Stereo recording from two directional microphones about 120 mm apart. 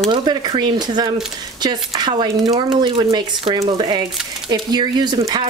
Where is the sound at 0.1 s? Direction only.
35° right (ahead or behind).